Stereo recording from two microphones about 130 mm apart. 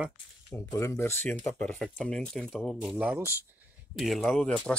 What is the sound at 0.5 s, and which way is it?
Speech, 20° left (ahead or behind).